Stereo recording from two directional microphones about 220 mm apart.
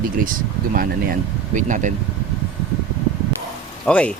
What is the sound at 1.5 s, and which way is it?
Speech, 35° right (ahead or behind).